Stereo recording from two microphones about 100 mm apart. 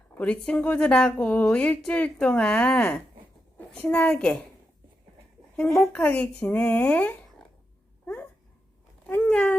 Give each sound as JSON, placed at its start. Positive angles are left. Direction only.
{"t": 0.1, "sound": "a woman's voice", "side_deg": 15}
{"t": 5.9, "sound": "a woman's voice", "side_deg": 15}
{"t": 8.0, "sound": "dog", "side_deg": 15}
{"t": 9.0, "sound": "a sound", "side_deg": 15}